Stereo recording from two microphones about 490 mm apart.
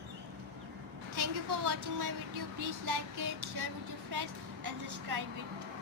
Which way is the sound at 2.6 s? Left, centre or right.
Right.